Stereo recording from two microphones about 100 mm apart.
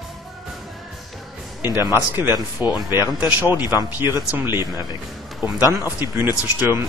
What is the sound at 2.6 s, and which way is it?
Speech, 20° right (ahead or behind).